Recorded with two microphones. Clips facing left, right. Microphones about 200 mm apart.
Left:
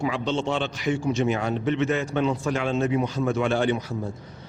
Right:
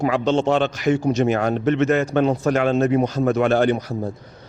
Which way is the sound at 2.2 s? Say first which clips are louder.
Right 6 dB; 60° right (ahead or behind).